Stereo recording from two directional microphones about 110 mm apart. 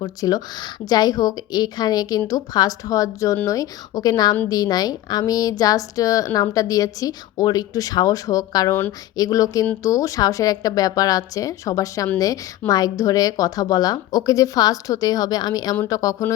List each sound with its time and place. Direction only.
0.0 s a woman's voice: 35° left (ahead or behind)
15.7 s a woman's voice: 30° left (ahead or behind)